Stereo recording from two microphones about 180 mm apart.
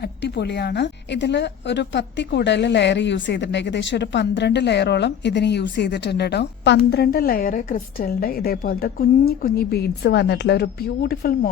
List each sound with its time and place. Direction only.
0.2 s a woman's voice: 70° left (ahead or behind)